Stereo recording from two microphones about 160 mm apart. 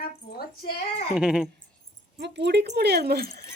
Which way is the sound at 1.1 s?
5° right (ahead or behind).